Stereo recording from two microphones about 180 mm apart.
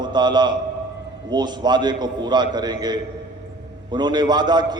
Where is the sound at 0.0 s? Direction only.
25° right (ahead or behind).